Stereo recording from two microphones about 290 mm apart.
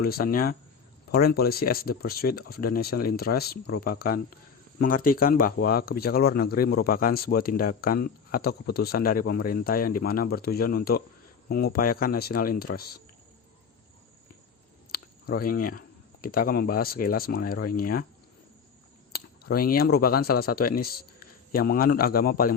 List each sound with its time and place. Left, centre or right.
0.0 s speech: left
14.9 s a sound: left
16.2 s speech: left
19.1 s a man's voice: left